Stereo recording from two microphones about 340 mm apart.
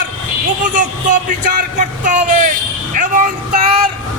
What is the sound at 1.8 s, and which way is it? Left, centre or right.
Speech, right.